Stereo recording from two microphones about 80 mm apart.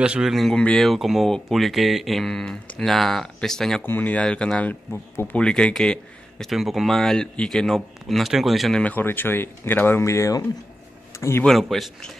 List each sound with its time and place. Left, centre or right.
0.0 s speech: centre
0.3 s speech: centre
0.6 s speech: centre
0.8 s speech: centre
3.8 s speech: left
5.4 s speech: centre
8.7 s speech: left
11.4 s speech: centre